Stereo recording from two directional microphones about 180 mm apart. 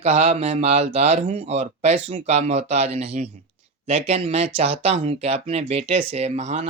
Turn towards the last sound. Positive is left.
turn(degrees=-35)  # may be behind; listen again after turning